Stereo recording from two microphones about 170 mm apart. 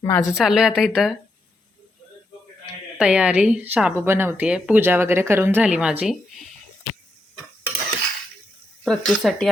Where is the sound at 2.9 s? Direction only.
5° right (ahead or behind).